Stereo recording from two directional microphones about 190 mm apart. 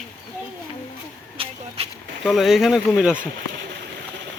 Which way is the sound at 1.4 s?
30° right (ahead or behind).